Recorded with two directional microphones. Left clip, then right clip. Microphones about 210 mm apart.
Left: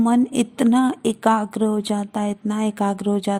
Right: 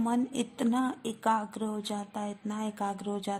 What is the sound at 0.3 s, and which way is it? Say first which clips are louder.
Speech: left 11 dB; 25° left (ahead or behind).